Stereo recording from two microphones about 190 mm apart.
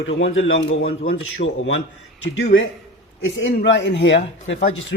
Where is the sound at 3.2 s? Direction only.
75° left (ahead or behind).